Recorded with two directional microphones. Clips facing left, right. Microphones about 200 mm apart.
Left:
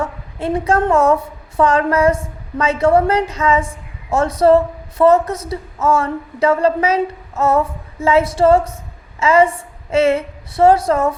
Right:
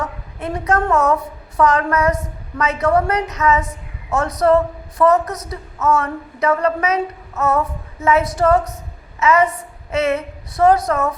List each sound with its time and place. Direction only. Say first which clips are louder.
0.0 s a woman's voice: left 4 dB; 30° left (ahead or behind)